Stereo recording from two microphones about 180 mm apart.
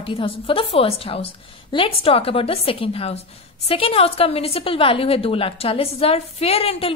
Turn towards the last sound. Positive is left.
turn(degrees=35)  # may be behind; listen again after turning